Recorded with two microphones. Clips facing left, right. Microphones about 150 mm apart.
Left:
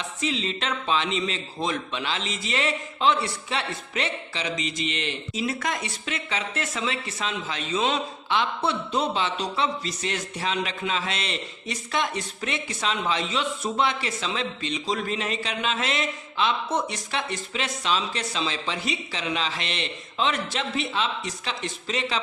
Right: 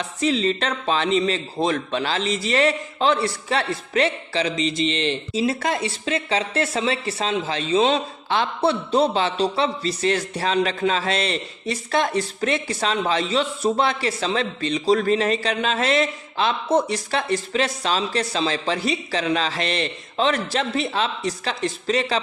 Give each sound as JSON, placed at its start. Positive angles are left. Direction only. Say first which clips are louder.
{"t": 0.2, "sound": "a man's voice", "louder": "right 8 dB", "side_deg": -40}